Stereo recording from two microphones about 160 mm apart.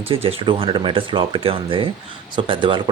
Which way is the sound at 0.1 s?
35° right (ahead or behind).